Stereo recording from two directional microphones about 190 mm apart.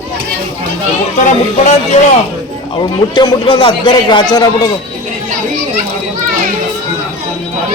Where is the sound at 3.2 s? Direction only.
25° left (ahead or behind).